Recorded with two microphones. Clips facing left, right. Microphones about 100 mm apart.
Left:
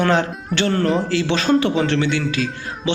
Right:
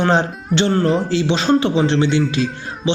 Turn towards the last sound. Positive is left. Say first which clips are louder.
# right 2 dB
turn(degrees=-25)  # may be behind; listen again after turning